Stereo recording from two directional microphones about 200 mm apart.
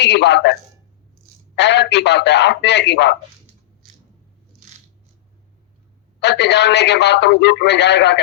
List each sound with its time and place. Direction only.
0.0 s a man's voice: 60° left (ahead or behind)
1.5 s a man's voice: 60° left (ahead or behind)
6.1 s a man's voice: 60° left (ahead or behind)